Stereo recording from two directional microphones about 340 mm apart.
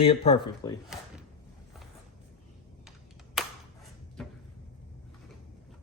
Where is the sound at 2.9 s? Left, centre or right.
Centre.